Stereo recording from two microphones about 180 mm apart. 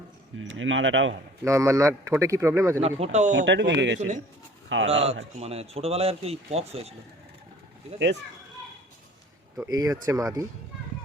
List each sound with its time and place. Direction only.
0.3 s speech: 90° right
1.5 s speech: 15° right (ahead or behind)
3.0 s speech: 40° right (ahead or behind)
3.4 s speech: 80° right
4.9 s speech: 35° right (ahead or behind)
7.9 s speech: 85° right
9.6 s speech: 20° right (ahead or behind)